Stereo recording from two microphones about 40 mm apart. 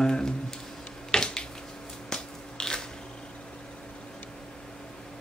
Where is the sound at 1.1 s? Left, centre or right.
Centre.